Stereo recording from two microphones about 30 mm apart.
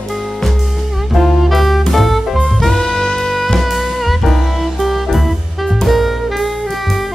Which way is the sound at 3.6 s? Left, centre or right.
Centre.